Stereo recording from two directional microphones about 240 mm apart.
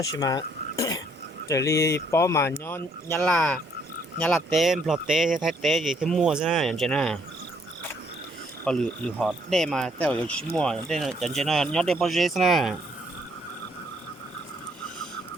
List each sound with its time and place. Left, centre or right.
0.0 s speech: centre
8.6 s speech: centre